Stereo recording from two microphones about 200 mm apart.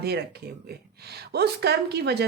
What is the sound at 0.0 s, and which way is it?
Speech, 55° right (ahead or behind).